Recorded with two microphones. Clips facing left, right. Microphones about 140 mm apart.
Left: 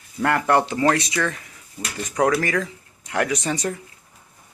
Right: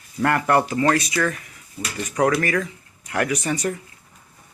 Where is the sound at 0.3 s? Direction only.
15° left (ahead or behind).